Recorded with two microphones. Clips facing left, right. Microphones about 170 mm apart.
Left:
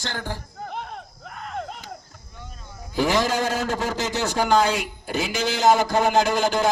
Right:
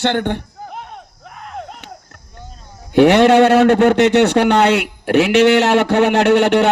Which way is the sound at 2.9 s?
70° right (ahead or behind).